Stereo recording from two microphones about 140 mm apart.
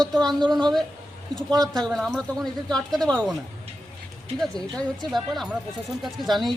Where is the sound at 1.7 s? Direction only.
Centre (ahead or behind).